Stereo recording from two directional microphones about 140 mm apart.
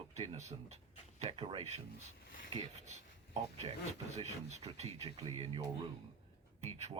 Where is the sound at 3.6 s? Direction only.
45° right (ahead or behind).